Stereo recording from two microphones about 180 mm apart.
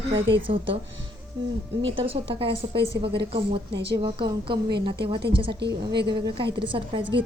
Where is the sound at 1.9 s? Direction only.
30° right (ahead or behind).